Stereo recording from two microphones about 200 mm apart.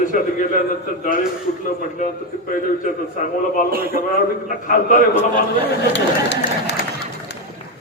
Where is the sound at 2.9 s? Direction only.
40° left (ahead or behind).